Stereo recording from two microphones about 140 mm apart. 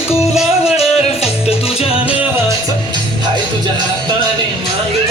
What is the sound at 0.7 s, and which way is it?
Music, 45° left (ahead or behind).